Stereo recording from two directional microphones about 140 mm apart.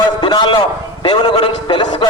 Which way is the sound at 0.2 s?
35° left (ahead or behind).